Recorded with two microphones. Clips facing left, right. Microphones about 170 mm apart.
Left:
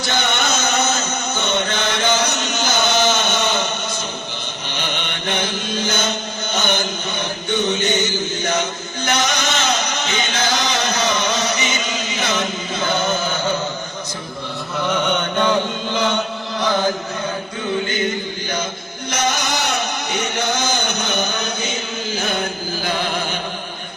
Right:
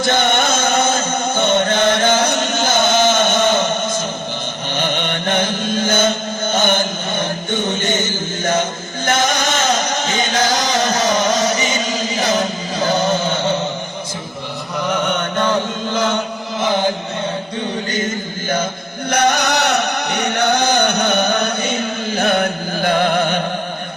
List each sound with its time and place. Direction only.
0.0 s music: 50° right (ahead or behind)
4.7 s chant: 50° right (ahead or behind)
9.0 s a sound: 45° right (ahead or behind); by 13.6 s 25° right (ahead or behind)
14.8 s mantra: 10° right (ahead or behind)
15.9 s chant: 5° right (ahead or behind)
16.6 s chant: 20° right (ahead or behind)
17.9 s a sound: 45° right (ahead or behind)
19.1 s music: 60° right (ahead or behind)